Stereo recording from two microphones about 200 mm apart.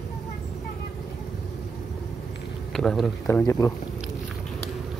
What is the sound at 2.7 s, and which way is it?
Speech, centre (ahead or behind).